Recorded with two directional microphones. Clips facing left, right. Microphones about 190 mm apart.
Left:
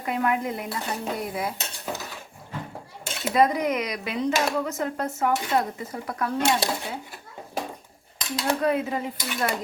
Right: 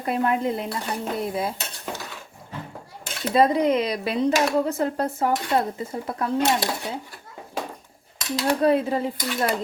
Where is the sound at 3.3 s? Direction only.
30° right (ahead or behind).